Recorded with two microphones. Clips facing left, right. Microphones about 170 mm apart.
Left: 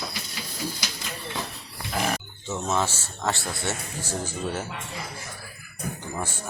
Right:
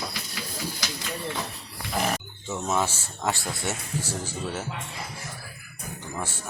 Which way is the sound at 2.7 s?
10° right (ahead or behind).